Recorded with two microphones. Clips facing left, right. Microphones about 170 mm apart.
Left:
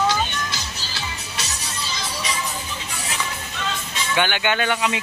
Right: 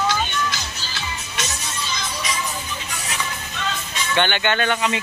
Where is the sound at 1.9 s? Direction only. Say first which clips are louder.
Even; 35° left (ahead or behind).